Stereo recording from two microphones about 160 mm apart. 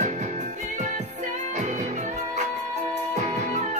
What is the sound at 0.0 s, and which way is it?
Music, 50° right (ahead or behind).